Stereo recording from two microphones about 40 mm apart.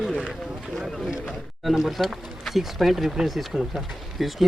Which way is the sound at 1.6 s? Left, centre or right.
Centre.